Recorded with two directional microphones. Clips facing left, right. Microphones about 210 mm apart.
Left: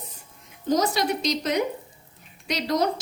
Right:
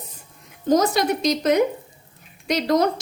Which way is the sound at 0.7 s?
50° right (ahead or behind).